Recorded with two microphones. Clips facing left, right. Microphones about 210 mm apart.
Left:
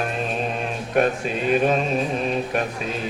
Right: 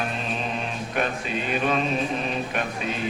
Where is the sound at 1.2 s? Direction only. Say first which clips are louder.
Left 3 dB; 45° left (ahead or behind).